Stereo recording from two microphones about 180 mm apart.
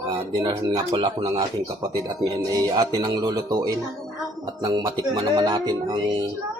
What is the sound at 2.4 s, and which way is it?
Music, 20° right (ahead or behind).